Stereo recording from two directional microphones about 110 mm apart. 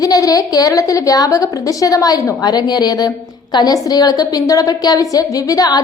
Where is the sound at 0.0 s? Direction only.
35° left (ahead or behind).